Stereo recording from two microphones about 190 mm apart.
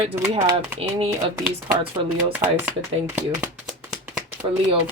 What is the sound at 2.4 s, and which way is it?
Speech, 10° right (ahead or behind).